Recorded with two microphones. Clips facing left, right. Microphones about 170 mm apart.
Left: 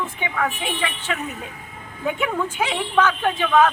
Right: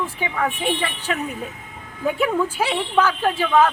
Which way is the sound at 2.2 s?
35° right (ahead or behind).